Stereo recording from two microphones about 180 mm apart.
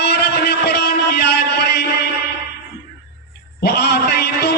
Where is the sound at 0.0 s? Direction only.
65° left (ahead or behind).